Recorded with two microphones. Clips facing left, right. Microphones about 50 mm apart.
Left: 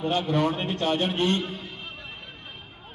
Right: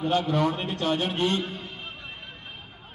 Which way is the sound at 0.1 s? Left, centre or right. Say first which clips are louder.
Right 1 dB; left.